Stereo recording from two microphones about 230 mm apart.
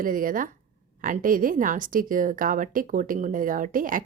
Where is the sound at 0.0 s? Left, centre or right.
Right.